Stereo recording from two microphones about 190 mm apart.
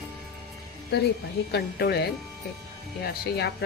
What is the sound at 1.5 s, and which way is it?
A woman's voice, 60° left (ahead or behind).